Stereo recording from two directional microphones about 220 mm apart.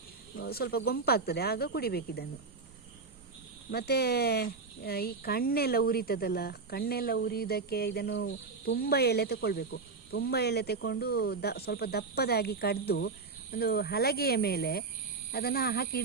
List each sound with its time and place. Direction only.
0.4 s speech: 45° left (ahead or behind)
3.7 s speech: 45° left (ahead or behind)